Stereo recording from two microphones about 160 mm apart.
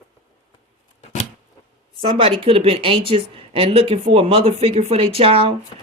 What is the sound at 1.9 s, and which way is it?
Speech, 35° right (ahead or behind).